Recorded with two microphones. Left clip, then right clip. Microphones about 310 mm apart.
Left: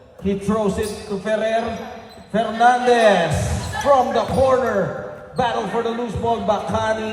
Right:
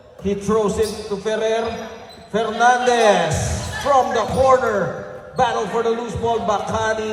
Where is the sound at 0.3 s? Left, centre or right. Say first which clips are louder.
Right 2 dB; right.